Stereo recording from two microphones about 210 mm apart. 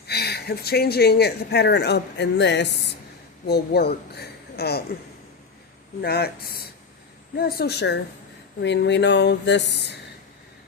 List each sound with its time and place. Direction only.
0.1 s speech: 50° left (ahead or behind)
6.0 s speech: 50° left (ahead or behind)